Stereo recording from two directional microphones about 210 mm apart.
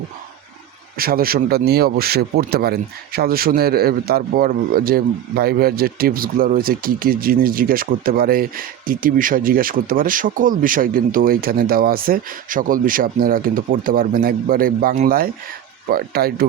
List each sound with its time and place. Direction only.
0.9 s speech: 45° right (ahead or behind)